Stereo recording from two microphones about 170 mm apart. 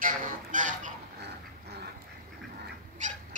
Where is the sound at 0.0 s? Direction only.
50° right (ahead or behind).